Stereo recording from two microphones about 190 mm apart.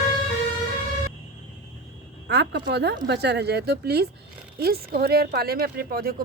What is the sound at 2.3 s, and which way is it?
Speech, 60° right (ahead or behind).